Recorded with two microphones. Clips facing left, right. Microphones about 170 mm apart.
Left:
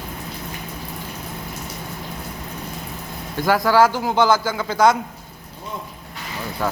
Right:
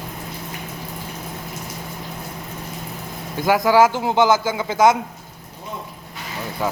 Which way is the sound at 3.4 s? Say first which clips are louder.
Right 1 dB; 20° right (ahead or behind).